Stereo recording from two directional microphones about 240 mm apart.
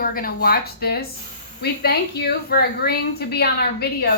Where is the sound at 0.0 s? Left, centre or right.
Left.